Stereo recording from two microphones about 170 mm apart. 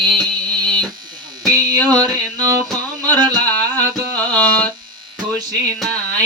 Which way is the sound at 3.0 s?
25° right (ahead or behind).